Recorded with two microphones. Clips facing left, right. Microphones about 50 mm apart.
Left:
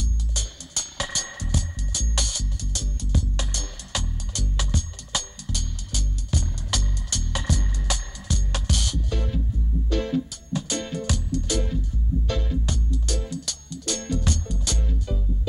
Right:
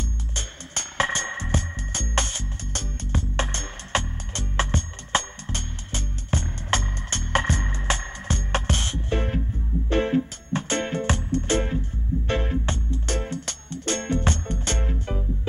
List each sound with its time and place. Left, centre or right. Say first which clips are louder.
0.3 s music: right 2 dB; right